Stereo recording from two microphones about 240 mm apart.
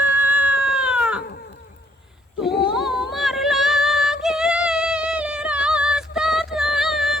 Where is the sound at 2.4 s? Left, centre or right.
Left.